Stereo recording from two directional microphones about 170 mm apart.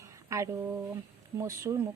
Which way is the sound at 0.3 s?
15° right (ahead or behind).